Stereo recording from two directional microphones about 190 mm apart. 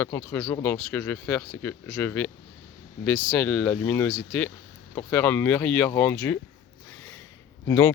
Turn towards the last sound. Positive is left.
turn(degrees=15)  # may be behind; listen again after turning